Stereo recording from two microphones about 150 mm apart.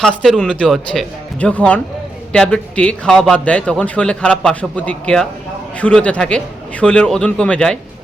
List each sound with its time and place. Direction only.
0.0 s a man's voice: 5° left (ahead or behind)